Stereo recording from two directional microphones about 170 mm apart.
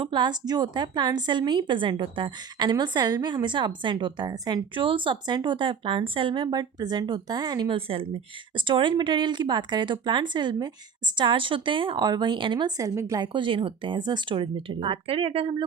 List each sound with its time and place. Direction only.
0.0 s speech: 25° right (ahead or behind)